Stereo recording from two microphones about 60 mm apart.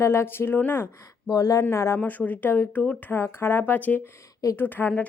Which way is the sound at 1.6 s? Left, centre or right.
Left.